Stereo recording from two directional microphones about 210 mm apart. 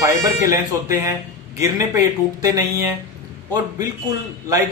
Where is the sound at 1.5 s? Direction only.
15° right (ahead or behind).